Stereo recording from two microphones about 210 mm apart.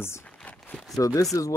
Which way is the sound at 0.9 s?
15° left (ahead or behind).